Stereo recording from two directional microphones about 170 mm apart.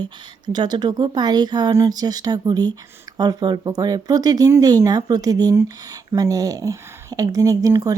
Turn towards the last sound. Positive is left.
turn(degrees=-20)  # may be behind; listen again after turning